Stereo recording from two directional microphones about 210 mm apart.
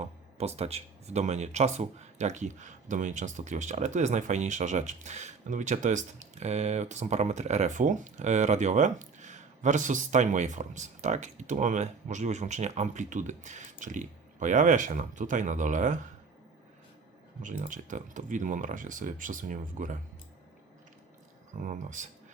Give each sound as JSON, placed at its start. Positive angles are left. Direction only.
{"t": 0.0, "sound": "speech", "side_deg": -30}
{"t": 17.4, "sound": "speech", "side_deg": -35}
{"t": 21.6, "sound": "speech", "side_deg": -40}